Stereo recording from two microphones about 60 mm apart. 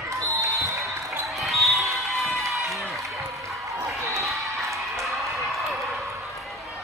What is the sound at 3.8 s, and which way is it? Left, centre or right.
Basketball bounce, right.